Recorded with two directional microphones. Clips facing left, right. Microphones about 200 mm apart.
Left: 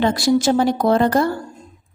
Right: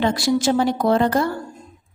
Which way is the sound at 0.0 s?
40° left (ahead or behind).